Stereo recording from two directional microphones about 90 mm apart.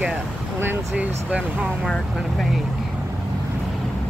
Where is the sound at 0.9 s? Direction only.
15° right (ahead or behind).